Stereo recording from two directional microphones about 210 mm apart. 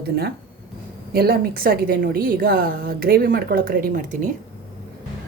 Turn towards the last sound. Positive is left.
turn(degrees=-40)  # may be behind; listen again after turning